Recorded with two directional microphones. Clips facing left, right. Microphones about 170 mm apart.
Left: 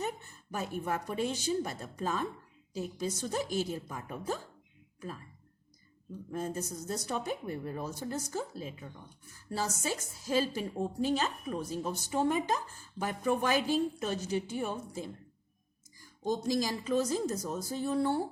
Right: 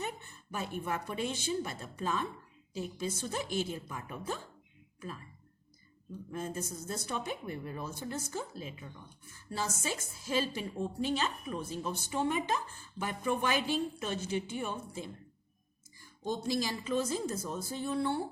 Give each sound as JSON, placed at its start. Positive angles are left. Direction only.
{"t": 0.0, "sound": "a woman's voice", "side_deg": 40}
{"t": 6.3, "sound": "a woman's voice", "side_deg": 40}